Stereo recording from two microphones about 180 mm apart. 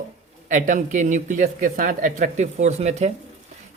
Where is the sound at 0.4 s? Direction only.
45° right (ahead or behind).